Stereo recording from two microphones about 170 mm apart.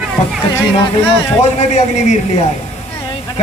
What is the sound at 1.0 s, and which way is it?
A man's voice, 40° left (ahead or behind).